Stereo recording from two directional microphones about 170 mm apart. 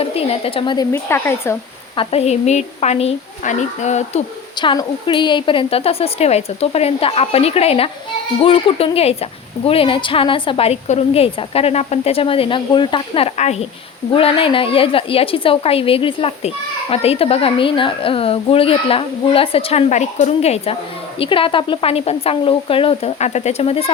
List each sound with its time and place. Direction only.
0.0 s a woman's voice: 35° left (ahead or behind)
0.9 s a woman's voice: 15° left (ahead or behind)
2.0 s a woman's voice: 35° left (ahead or behind)
4.5 s a woman's voice: 25° left (ahead or behind)